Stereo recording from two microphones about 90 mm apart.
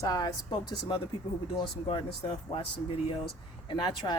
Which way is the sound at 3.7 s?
60° left (ahead or behind).